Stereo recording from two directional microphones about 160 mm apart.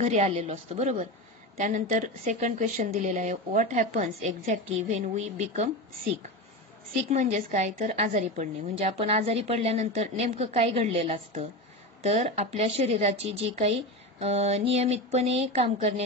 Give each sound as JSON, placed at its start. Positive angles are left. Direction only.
{"t": 0.0, "sound": "speech", "side_deg": -45}
{"t": 7.1, "sound": "a woman's voice", "side_deg": -45}